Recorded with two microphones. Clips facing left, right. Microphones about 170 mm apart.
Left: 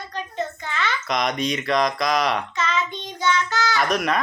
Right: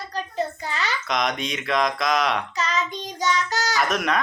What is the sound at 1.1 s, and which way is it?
Speech, centre (ahead or behind).